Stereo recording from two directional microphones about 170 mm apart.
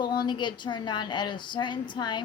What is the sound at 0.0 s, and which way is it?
Speech, 25° left (ahead or behind).